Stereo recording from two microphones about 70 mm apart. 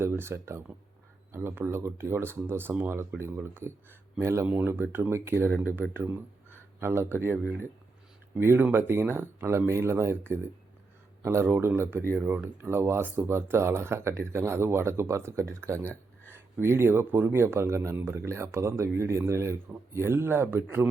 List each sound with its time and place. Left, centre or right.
0.0 s speech: right
4.4 s speech: right
11.4 s speech: right
17.9 s speech: right